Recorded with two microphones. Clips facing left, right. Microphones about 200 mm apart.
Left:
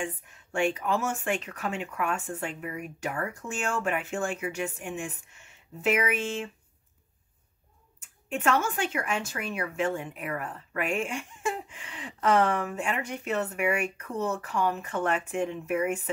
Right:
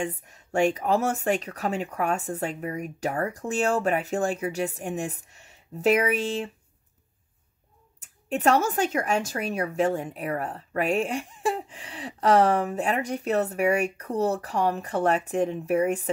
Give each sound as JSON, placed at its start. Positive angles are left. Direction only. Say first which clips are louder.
{"t": 0.0, "sound": "speech", "louder": "right 4 dB", "side_deg": -40}
{"t": 8.0, "sound": "speech", "louder": "right 5 dB", "side_deg": -40}